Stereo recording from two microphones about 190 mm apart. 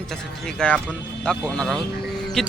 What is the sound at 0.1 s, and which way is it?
Speech, 5° left (ahead or behind).